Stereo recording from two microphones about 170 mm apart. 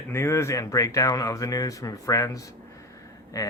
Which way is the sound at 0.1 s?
15° left (ahead or behind).